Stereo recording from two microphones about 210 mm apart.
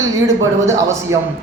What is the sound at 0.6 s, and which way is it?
Speech, 15° right (ahead or behind).